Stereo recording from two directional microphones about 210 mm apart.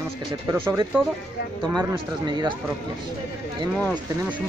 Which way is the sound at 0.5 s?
10° right (ahead or behind).